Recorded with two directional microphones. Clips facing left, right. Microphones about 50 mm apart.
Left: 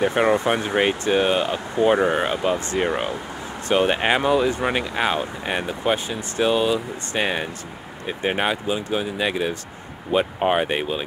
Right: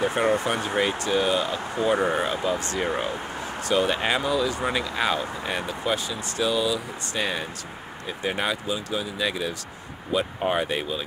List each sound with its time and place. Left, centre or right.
0.0 s speech: left